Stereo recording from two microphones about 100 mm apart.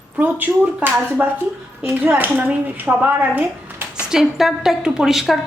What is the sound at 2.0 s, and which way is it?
Speech, 20° right (ahead or behind).